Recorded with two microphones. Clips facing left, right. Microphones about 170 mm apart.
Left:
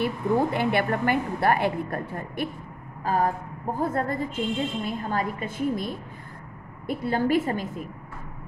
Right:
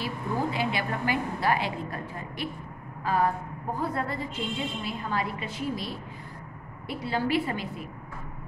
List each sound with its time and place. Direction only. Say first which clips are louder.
0.0 s a woman's voice: left 6 dB; 55° left (ahead or behind)